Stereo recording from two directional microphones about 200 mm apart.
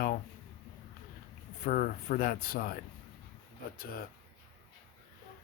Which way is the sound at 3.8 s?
45° left (ahead or behind).